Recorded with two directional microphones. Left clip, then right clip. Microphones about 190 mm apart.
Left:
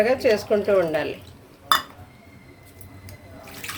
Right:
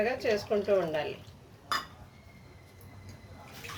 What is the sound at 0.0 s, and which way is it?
Speech, 20° left (ahead or behind).